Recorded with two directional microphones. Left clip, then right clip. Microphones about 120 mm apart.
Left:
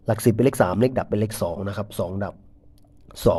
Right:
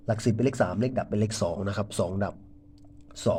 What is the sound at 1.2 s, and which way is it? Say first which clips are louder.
Speech: left 3 dB; 20° left (ahead or behind).